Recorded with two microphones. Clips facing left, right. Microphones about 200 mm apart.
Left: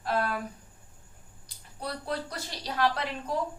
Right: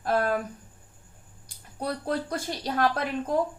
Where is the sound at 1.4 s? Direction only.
50° right (ahead or behind).